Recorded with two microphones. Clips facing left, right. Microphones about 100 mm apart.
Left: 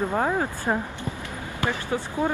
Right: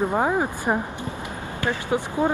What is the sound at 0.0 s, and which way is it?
Speech, 15° right (ahead or behind).